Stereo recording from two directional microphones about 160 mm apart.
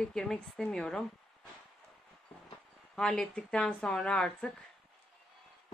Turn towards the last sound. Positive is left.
turn(degrees=5)  # may be behind; listen again after turning